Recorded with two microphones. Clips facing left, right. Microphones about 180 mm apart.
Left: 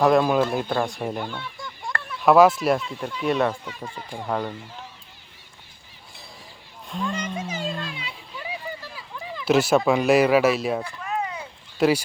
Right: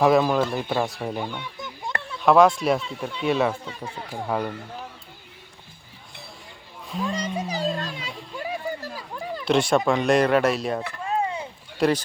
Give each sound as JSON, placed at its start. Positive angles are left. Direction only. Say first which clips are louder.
{"t": 0.0, "sound": "speech", "louder": "even", "side_deg": 0}
{"t": 2.2, "sound": "speech", "louder": "left 1 dB", "side_deg": 5}
{"t": 6.8, "sound": "speech", "louder": "right 1 dB", "side_deg": 0}
{"t": 7.1, "sound": "a sound", "louder": "right 2 dB", "side_deg": -35}
{"t": 9.4, "sound": "speech", "louder": "left 2 dB", "side_deg": 5}
{"t": 11.0, "sound": "a sound", "louder": "right 3 dB", "side_deg": -30}
{"t": 11.8, "sound": "a man's voice", "louder": "left 1 dB", "side_deg": 10}